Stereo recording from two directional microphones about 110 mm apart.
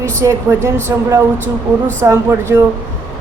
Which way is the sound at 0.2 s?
25° right (ahead or behind).